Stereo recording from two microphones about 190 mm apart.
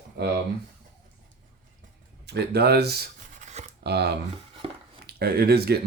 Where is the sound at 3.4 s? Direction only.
40° right (ahead or behind).